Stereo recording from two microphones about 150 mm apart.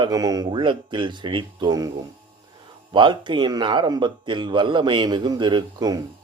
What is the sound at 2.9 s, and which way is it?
Speech, 30° right (ahead or behind).